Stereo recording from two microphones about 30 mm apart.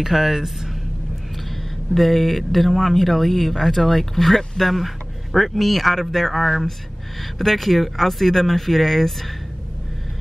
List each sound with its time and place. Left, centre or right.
0.0 s speech: centre
2.0 s speech: centre